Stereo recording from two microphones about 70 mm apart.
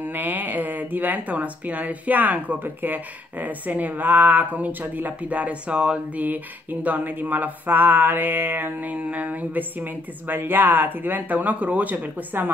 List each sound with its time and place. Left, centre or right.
0.0 s speech: right